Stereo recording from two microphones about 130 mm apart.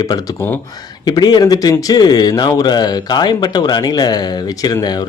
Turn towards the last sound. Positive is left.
turn(degrees=30)  # may be behind; listen again after turning